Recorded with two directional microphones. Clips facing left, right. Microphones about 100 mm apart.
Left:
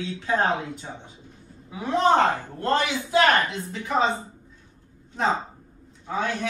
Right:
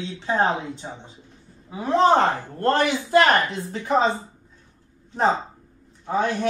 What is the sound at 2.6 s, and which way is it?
A man's voice, 50° right (ahead or behind).